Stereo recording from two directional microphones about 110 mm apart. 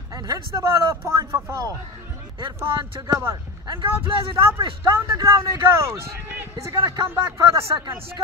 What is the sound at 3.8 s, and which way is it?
Speech, 50° right (ahead or behind).